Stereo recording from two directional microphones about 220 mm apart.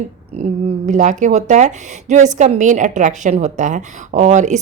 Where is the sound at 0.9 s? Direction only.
35° right (ahead or behind).